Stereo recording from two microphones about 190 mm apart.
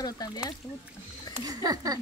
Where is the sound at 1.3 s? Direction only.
20° right (ahead or behind).